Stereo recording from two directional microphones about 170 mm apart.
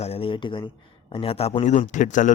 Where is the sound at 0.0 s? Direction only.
35° left (ahead or behind).